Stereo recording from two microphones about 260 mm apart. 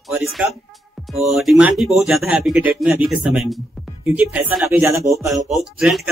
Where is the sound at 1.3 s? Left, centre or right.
Centre.